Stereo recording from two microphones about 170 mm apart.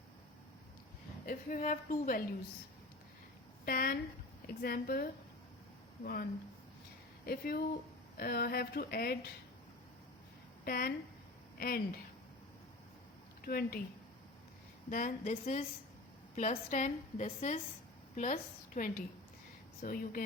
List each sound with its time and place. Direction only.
1.3 s a woman's voice: 50° left (ahead or behind)
3.7 s speech: 60° left (ahead or behind)
7.3 s speech: 60° left (ahead or behind)
10.7 s speech: 60° left (ahead or behind)
13.4 s a woman's voice: 60° left (ahead or behind)
14.8 s a woman's voice: 50° left (ahead or behind)